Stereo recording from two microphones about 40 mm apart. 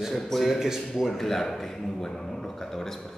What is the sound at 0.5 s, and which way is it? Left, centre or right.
Speech, centre.